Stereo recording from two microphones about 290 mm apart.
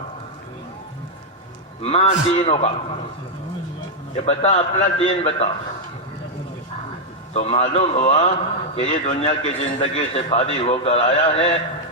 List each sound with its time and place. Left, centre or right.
1.8 s a man's voice: left
4.3 s a man's voice: left
7.3 s a man's voice: left